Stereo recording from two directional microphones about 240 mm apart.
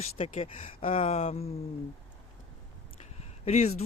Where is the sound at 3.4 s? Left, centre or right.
Left.